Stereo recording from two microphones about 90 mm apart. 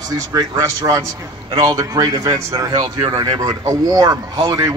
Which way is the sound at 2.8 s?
55° right (ahead or behind).